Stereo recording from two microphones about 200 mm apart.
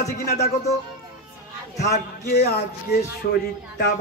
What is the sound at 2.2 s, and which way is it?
Speech, 50° left (ahead or behind).